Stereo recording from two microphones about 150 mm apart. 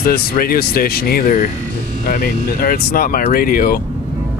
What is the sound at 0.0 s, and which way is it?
Speech, 80° left.